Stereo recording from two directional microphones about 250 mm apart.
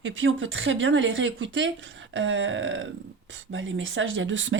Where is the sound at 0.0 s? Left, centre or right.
Right.